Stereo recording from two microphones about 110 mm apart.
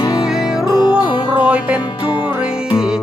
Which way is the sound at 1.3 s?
10° right (ahead or behind).